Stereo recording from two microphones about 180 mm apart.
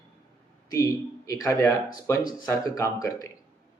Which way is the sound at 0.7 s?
20° left (ahead or behind).